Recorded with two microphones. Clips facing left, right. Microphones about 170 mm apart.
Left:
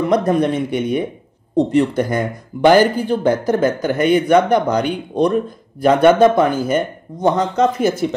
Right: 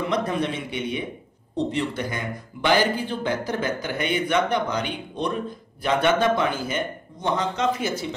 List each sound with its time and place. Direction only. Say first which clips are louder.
0.1 s speech: left 9 dB; 45° left (ahead or behind)